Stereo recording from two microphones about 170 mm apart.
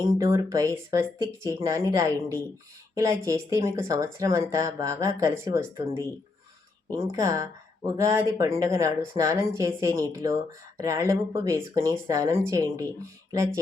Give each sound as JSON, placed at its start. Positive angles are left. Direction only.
{"t": 0.0, "sound": "speech", "side_deg": -20}